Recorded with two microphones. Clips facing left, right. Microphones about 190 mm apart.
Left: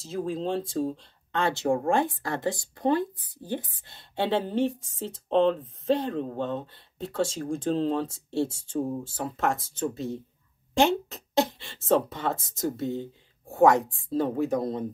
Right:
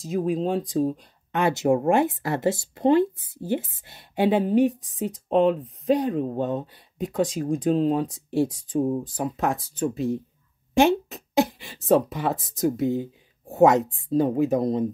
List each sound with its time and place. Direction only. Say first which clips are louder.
0.0 s a woman's voice: right 5 dB; 15° right (ahead or behind)
10.8 s a sound: right 4 dB; 15° right (ahead or behind)
12.5 s speech: right 6 dB; 20° right (ahead or behind)